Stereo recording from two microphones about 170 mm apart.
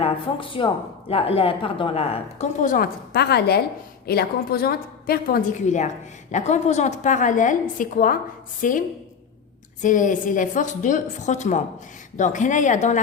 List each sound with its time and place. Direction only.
0.0 s a woman's voice: 30° left (ahead or behind); by 8.8 s 50° left (ahead or behind)
9.8 s a woman's voice: 50° left (ahead or behind)